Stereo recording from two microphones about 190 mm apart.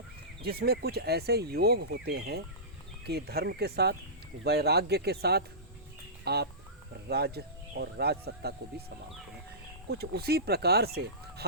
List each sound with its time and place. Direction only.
0.4 s speech: 55° right (ahead or behind)
9.9 s speech: 55° right (ahead or behind)